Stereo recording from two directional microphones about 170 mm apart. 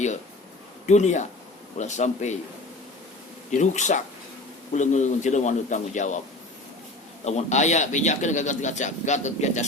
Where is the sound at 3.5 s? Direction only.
45° left (ahead or behind).